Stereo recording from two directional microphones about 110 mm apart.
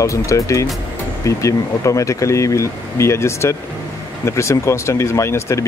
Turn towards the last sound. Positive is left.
turn(degrees=25)  # may be behind; listen again after turning